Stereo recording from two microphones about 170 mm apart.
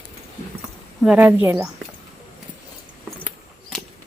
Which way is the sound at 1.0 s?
10° right (ahead or behind).